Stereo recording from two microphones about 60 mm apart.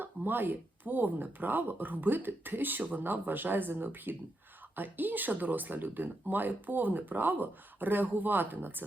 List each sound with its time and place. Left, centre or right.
0.0 s speech: right